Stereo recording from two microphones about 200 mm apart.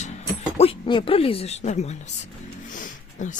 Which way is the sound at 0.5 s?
25° left (ahead or behind).